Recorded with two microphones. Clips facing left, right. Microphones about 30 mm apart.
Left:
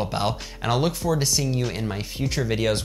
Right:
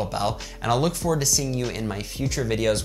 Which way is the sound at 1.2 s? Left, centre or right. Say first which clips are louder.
Left 1 dB; left.